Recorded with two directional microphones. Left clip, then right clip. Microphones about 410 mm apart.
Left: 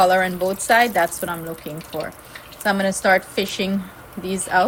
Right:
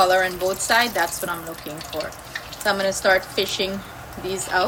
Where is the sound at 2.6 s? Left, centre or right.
Centre.